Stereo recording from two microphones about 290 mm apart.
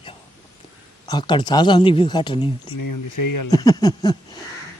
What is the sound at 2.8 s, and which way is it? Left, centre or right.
Speech, left.